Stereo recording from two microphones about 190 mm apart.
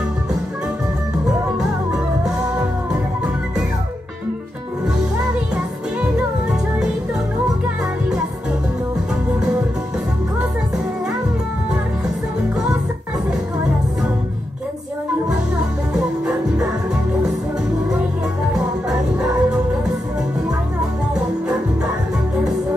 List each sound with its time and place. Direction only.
1.6 s music: 5° right (ahead or behind)
15.9 s music: 5° right (ahead or behind)
18.5 s music: 5° right (ahead or behind)